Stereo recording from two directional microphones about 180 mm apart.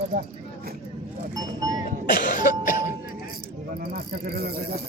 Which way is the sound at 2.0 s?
50° left (ahead or behind).